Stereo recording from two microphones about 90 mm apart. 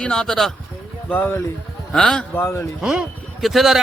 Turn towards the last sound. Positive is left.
turn(degrees=0)  # may be behind; listen again after turning